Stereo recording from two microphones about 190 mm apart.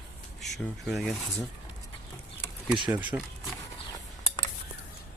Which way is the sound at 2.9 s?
10° right (ahead or behind).